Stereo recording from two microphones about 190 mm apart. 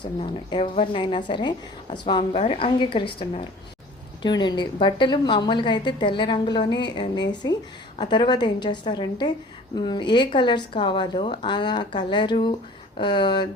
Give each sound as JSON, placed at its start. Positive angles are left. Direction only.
{"t": 0.0, "sound": "a woman's voice", "side_deg": 25}
{"t": 4.2, "sound": "a woman's voice", "side_deg": 25}